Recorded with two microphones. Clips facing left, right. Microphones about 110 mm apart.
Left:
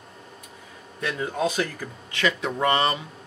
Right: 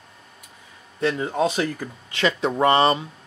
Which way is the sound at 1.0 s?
25° right (ahead or behind).